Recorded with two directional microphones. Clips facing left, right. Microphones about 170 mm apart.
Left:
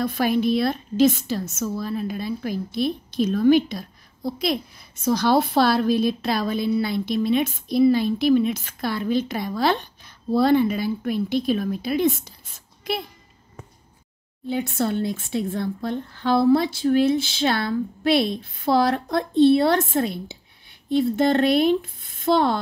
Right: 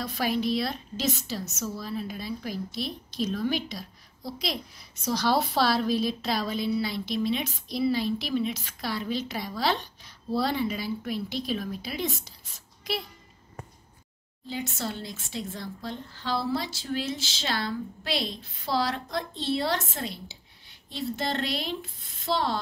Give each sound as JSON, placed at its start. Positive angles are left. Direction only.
{"t": 0.0, "sound": "a woman's voice", "side_deg": 55}
{"t": 14.5, "sound": "a woman's voice", "side_deg": 55}